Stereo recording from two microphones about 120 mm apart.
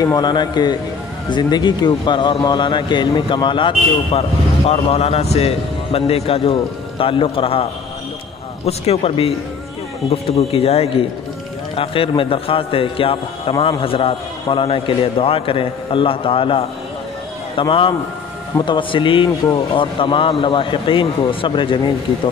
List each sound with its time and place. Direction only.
0.0 s a man's voice: 35° left (ahead or behind)
4.6 s a man's voice: 60° left (ahead or behind)
8.6 s a man's voice: 60° left (ahead or behind); by 22.3 s 45° left (ahead or behind)